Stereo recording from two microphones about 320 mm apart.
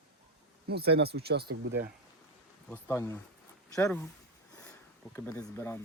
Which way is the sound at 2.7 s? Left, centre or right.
Centre.